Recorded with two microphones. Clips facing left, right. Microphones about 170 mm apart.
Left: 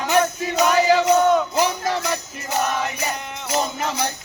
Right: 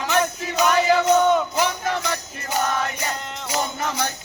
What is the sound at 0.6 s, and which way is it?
Music, 5° left (ahead or behind).